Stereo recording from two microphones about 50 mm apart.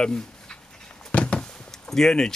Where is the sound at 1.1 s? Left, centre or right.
Left.